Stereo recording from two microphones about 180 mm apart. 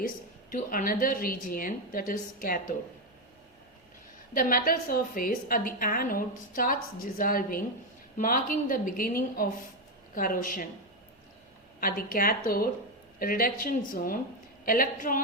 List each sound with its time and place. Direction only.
0.5 s a woman's voice: 50° left (ahead or behind)
4.4 s a woman's voice: 50° left (ahead or behind)
11.8 s a woman's voice: 50° left (ahead or behind)